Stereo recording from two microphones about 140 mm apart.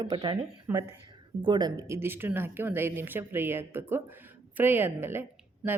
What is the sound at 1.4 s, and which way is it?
A woman's voice, 30° right (ahead or behind).